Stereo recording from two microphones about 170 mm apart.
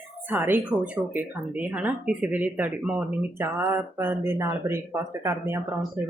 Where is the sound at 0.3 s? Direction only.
10° right (ahead or behind).